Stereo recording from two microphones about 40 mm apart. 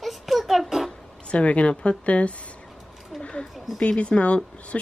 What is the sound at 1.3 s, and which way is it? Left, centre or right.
Speech, left.